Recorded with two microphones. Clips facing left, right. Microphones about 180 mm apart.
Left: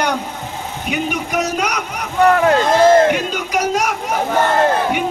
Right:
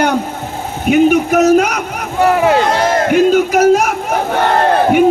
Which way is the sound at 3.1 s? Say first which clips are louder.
Right 10 dB; 45° right (ahead or behind).